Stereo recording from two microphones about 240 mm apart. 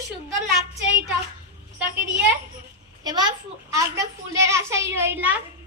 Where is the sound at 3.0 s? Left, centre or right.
Centre.